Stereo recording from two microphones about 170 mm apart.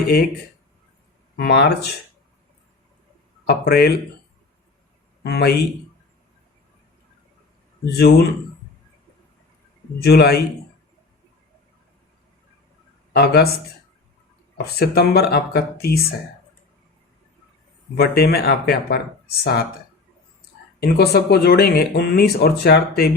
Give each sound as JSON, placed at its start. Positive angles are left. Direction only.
{"t": 1.4, "sound": "speech", "side_deg": 70}
{"t": 3.4, "sound": "speech", "side_deg": 65}
{"t": 5.2, "sound": "speech", "side_deg": 70}
{"t": 7.9, "sound": "speech", "side_deg": 70}
{"t": 10.0, "sound": "speech", "side_deg": 75}
{"t": 13.1, "sound": "speech", "side_deg": 70}
{"t": 14.6, "sound": "speech", "side_deg": 70}
{"t": 17.9, "sound": "speech", "side_deg": 70}
{"t": 20.8, "sound": "speech", "side_deg": 70}